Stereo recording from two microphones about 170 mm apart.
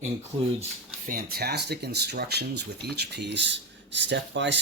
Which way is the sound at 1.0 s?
60° right (ahead or behind).